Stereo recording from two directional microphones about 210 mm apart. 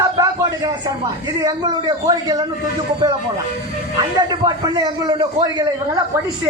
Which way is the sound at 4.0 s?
20° right (ahead or behind).